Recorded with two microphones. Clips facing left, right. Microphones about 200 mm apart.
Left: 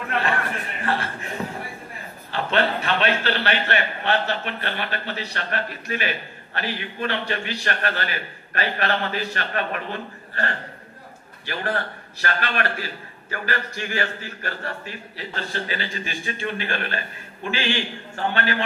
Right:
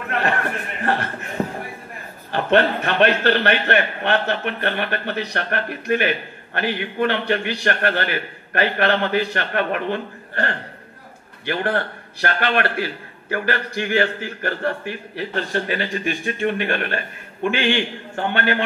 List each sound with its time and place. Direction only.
0.2 s a sound: 55° right (ahead or behind)
2.3 s a man's voice: 50° right (ahead or behind)
11.4 s a man's voice: 55° right (ahead or behind)